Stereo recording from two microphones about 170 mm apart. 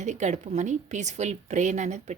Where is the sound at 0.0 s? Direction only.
45° right (ahead or behind).